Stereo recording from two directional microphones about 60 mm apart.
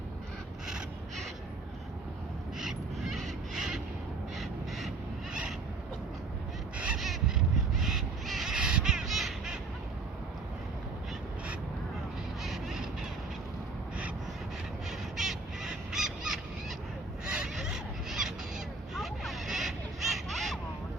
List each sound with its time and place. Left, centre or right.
2.6 s crow: centre
6.7 s crow: right
7.3 s crow: centre
8.5 s duck: centre
12.4 s duck: centre
14.8 s bird: centre
17.2 s a sound: centre